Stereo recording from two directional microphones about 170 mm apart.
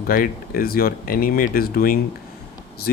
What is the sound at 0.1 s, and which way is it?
Speech, 60° left (ahead or behind).